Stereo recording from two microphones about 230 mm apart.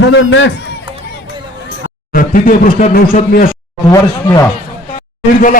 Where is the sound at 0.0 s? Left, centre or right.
Left.